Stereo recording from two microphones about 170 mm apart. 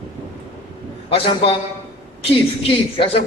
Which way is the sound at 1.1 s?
35° left (ahead or behind).